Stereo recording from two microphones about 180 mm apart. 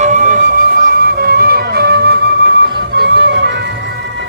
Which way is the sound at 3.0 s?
70° right (ahead or behind).